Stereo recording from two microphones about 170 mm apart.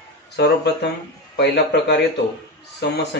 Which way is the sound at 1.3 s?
85° left.